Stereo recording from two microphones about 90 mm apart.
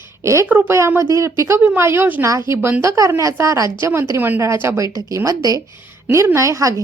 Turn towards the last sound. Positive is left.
turn(degrees=-35)  # may be behind; listen again after turning